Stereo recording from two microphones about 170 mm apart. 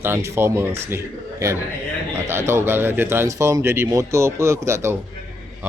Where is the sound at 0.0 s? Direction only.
15° right (ahead or behind).